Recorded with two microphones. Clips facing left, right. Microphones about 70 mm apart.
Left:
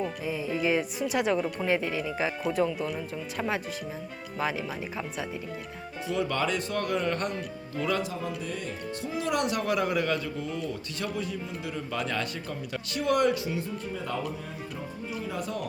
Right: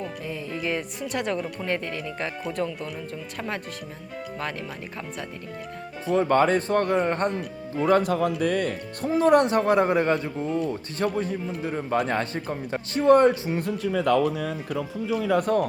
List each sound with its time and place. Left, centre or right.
0.0 s speech: centre
6.1 s speech: right
8.4 s speech: right
13.6 s speech: right
15.4 s speech: right